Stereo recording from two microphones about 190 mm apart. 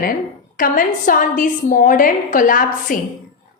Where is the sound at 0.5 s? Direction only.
45° left (ahead or behind).